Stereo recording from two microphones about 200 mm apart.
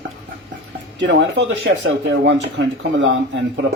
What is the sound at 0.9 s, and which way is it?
Speech, 60° right (ahead or behind).